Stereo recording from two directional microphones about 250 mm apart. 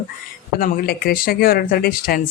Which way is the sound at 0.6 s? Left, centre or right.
Left.